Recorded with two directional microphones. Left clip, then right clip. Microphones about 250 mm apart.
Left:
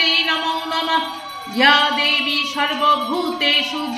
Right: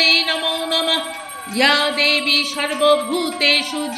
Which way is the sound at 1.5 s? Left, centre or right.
Right.